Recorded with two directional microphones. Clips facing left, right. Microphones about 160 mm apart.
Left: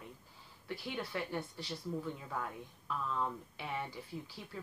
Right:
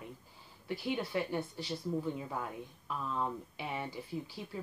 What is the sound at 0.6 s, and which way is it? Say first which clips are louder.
Speech: right 5 dB; 15° right (ahead or behind).